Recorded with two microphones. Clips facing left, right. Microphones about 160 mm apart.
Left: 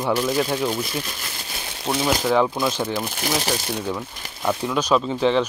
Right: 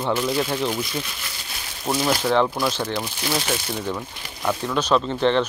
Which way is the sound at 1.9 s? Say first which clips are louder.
Even; centre (ahead or behind).